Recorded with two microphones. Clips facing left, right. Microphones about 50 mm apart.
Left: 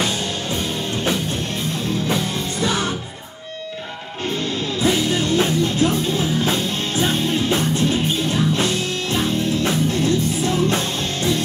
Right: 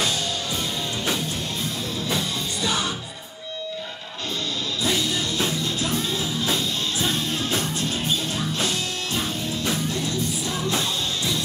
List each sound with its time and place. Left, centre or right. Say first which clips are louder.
2.0 s music: left 4 dB; left
4.8 s music: left 6 dB; left